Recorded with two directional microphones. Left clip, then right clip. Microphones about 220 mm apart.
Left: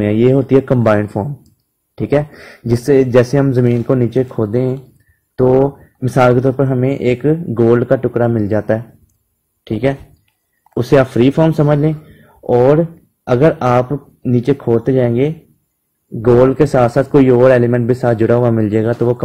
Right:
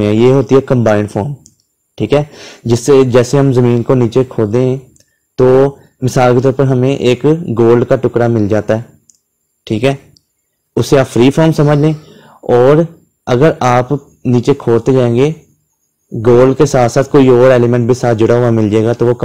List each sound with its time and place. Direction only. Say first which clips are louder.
0.0 s speech: right 3 dB; 20° right (ahead or behind)
5.9 s speech: right 1 dB; 20° right (ahead or behind)